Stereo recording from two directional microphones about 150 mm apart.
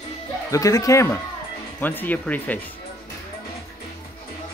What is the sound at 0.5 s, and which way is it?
Speech, 25° left (ahead or behind).